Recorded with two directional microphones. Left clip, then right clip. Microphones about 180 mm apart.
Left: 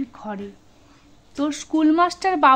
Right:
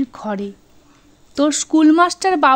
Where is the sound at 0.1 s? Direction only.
35° right (ahead or behind).